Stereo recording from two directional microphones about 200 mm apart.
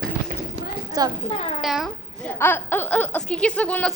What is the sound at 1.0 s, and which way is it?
Speech, 20° right (ahead or behind).